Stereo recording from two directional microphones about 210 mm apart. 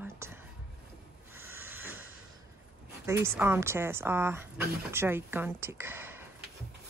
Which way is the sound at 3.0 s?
15° right (ahead or behind).